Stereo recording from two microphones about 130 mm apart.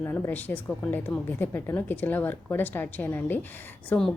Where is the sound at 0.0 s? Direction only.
15° left (ahead or behind).